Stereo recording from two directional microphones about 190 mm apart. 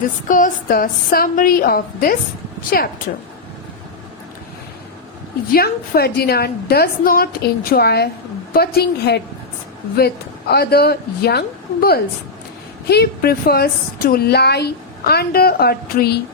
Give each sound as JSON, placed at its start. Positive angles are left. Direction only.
{"t": 0.3, "sound": "a woman's voice", "side_deg": 45}
{"t": 5.5, "sound": "a woman's voice", "side_deg": 55}